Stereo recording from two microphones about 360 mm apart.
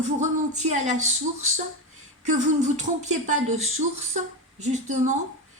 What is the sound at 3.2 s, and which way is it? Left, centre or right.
Speech, centre.